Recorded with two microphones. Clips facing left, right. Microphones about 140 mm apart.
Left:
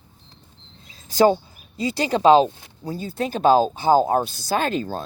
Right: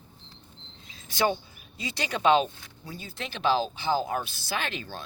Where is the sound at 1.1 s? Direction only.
35° left (ahead or behind).